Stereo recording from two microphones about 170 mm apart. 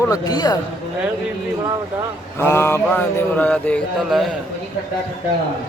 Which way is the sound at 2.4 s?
15° left (ahead or behind).